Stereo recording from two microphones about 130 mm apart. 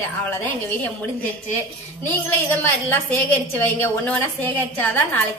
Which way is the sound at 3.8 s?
15° left (ahead or behind).